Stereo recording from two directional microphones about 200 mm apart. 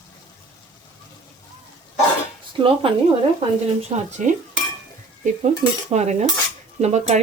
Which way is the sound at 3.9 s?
25° right (ahead or behind).